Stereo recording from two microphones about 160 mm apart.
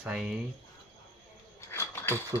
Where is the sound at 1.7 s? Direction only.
15° left (ahead or behind).